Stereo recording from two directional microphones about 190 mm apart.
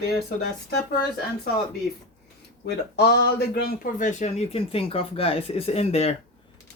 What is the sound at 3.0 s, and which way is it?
A man's voice, 60° left (ahead or behind).